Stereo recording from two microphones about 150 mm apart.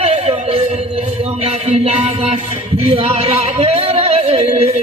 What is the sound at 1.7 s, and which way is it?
Music, 45° right (ahead or behind).